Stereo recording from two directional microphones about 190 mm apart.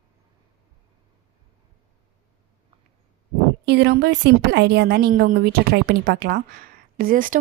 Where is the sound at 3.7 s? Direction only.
60° right (ahead or behind).